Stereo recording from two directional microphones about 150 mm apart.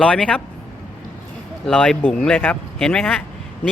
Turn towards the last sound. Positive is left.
turn(degrees=5)  # may be behind; listen again after turning